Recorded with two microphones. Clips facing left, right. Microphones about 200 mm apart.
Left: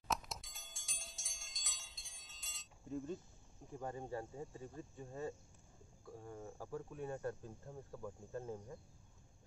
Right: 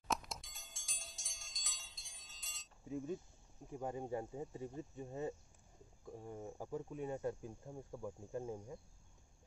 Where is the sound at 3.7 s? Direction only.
10° right (ahead or behind).